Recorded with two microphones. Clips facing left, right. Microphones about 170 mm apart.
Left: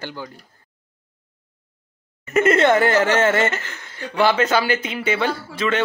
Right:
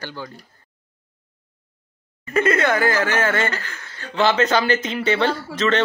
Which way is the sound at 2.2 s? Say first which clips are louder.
Left 3 dB; 25° left (ahead or behind).